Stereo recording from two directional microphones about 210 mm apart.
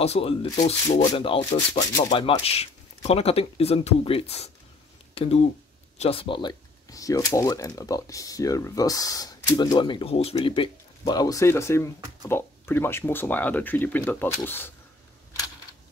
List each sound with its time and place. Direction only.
0.0 s speech: 30° left (ahead or behind); by 14.7 s 10° left (ahead or behind)